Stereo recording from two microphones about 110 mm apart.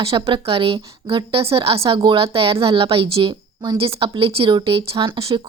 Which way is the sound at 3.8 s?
55° right (ahead or behind).